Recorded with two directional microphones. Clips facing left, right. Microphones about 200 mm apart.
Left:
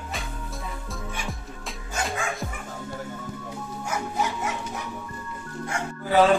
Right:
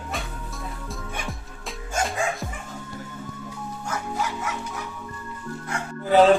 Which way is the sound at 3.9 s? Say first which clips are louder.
Left 1 dB; 20° left (ahead or behind).